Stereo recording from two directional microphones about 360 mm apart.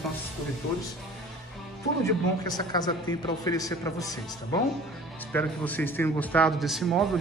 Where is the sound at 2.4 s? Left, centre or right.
Centre.